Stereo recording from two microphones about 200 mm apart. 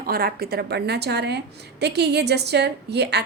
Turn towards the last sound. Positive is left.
turn(degrees=-55)  # may be behind; listen again after turning